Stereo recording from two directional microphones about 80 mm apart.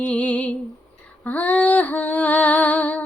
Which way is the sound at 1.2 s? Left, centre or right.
Centre.